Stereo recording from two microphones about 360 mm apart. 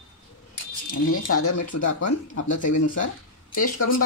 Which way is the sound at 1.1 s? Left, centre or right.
Left.